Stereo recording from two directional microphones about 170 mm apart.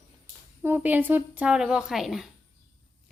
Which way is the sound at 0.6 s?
10° right (ahead or behind).